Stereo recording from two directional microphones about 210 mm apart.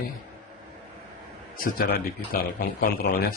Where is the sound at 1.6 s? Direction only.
45° left (ahead or behind).